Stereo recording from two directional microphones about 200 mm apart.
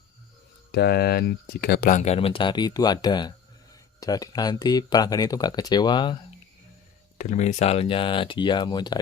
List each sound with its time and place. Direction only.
0.7 s speech: 50° left (ahead or behind)
2.0 s speech: 30° left (ahead or behind)
7.2 s speech: 35° left (ahead or behind); by 9.0 s 20° left (ahead or behind)